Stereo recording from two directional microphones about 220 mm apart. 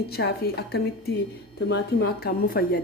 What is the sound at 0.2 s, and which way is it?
A woman's voice, 50° left (ahead or behind).